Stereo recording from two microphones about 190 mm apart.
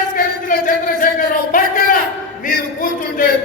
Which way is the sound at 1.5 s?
45° left (ahead or behind).